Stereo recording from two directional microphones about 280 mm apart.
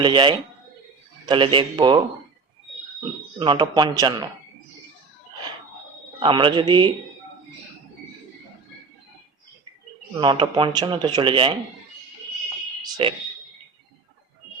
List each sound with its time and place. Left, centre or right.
0.0 s speech: centre
3.3 s speech: centre
6.1 s speech: centre
10.2 s speech: centre
12.8 s a sound: centre